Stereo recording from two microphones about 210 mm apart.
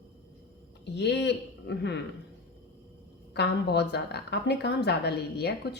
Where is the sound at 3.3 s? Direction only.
50° left (ahead or behind).